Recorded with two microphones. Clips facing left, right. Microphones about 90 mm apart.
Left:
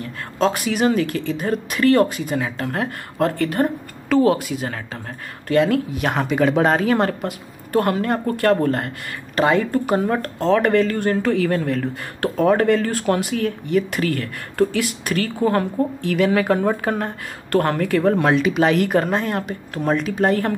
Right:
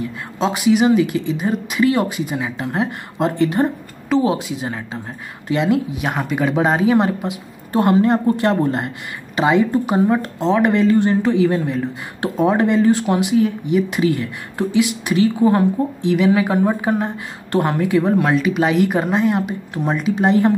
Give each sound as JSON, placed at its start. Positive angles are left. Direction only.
{"t": 0.0, "sound": "speech", "side_deg": -15}
{"t": 18.2, "sound": "speech", "side_deg": 0}